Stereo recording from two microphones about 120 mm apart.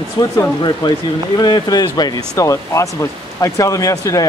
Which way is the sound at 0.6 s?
35° left (ahead or behind).